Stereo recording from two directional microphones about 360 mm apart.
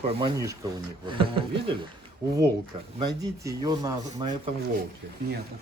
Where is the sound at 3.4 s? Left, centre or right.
Centre.